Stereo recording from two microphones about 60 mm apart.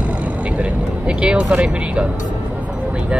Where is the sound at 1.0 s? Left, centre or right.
Centre.